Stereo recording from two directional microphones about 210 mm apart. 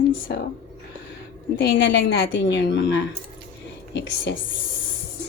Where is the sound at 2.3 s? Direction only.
55° left (ahead or behind).